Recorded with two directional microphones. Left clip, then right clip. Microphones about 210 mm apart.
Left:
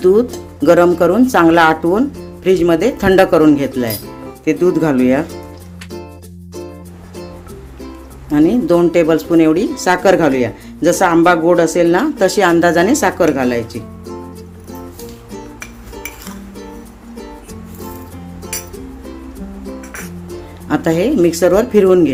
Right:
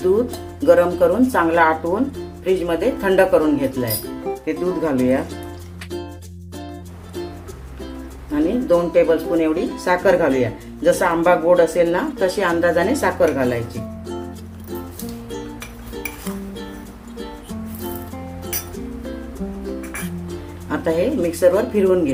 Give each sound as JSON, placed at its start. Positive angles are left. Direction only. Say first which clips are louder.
{"t": 0.6, "sound": "speech", "louder": "left 4 dB", "side_deg": 50}
{"t": 8.3, "sound": "speech", "louder": "left 5 dB", "side_deg": 50}
{"t": 20.7, "sound": "speech", "louder": "left 5 dB", "side_deg": 50}